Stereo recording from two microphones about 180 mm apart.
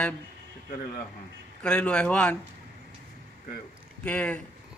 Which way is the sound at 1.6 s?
5° left (ahead or behind).